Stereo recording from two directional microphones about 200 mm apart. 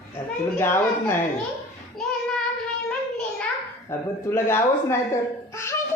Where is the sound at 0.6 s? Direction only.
10° left (ahead or behind).